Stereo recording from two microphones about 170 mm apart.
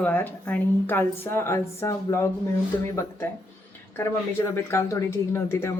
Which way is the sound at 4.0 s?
15° left (ahead or behind).